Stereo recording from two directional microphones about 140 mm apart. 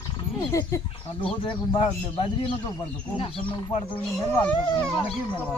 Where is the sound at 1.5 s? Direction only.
35° left (ahead or behind).